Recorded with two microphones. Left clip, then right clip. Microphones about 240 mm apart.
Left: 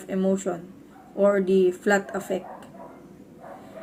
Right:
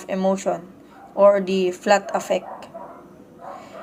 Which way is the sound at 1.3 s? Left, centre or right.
Centre.